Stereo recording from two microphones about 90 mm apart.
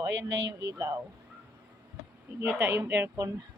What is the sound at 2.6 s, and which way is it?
Speech, 25° right (ahead or behind).